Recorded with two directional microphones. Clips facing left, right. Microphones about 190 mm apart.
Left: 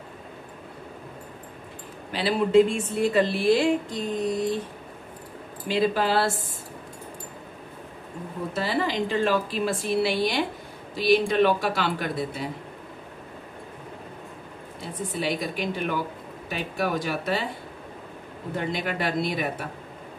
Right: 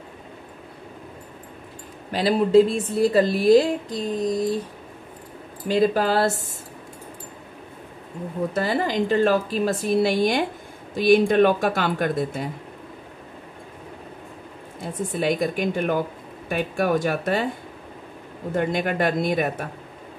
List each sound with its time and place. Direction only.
2.1 s a woman's voice: 40° right (ahead or behind)
5.7 s a woman's voice: 45° right (ahead or behind)
8.5 s a woman's voice: 45° right (ahead or behind)
15.0 s a woman's voice: 50° right (ahead or behind)
18.5 s a woman's voice: 50° right (ahead or behind)